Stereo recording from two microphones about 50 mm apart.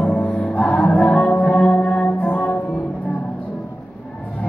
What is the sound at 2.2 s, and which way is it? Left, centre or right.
Music, left.